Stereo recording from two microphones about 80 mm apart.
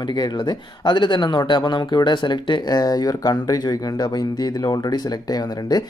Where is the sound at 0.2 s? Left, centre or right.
Left.